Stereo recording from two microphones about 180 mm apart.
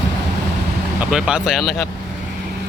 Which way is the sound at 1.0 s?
5° right (ahead or behind).